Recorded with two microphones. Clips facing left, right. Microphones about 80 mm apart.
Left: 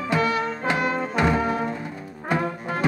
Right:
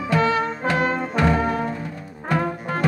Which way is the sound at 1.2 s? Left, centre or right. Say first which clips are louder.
Right 2 dB; centre.